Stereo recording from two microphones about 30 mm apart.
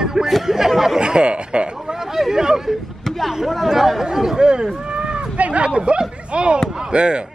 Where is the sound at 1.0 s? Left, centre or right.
Right.